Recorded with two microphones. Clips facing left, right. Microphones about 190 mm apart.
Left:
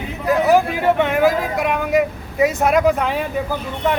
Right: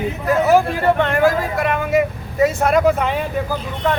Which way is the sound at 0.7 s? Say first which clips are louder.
Even; 10° left (ahead or behind).